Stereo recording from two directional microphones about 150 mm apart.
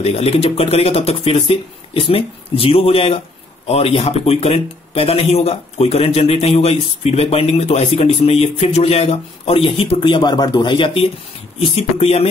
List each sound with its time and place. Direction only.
0.0 s speech: 40° left (ahead or behind)